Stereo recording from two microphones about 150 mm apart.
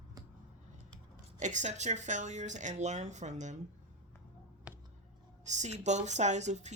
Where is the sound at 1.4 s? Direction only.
55° right (ahead or behind).